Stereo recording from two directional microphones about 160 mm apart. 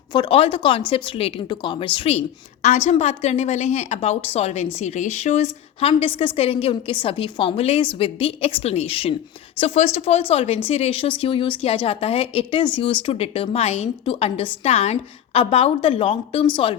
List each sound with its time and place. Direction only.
0.1 s speech: 30° left (ahead or behind)